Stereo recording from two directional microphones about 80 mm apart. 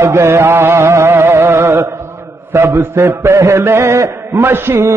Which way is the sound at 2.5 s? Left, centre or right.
Right.